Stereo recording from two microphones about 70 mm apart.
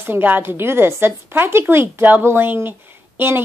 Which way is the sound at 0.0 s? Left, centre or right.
Right.